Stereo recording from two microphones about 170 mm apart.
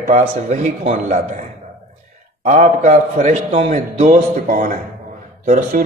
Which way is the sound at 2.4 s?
45° right (ahead or behind).